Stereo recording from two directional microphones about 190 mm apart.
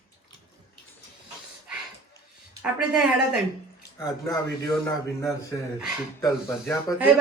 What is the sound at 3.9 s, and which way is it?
Speech, 20° left (ahead or behind).